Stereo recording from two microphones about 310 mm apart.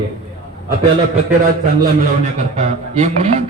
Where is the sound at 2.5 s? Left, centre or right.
Right.